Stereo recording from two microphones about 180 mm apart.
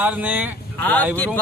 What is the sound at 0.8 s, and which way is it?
Speech, 10° left (ahead or behind).